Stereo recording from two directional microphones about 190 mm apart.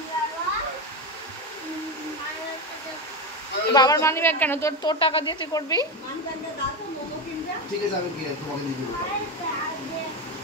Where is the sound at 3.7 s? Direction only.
20° left (ahead or behind).